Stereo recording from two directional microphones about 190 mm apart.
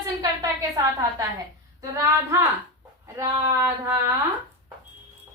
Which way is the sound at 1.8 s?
15° right (ahead or behind).